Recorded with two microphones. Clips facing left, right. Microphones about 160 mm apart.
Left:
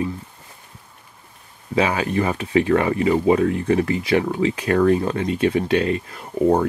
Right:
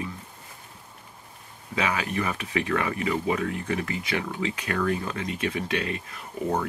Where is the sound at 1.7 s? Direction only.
30° left (ahead or behind).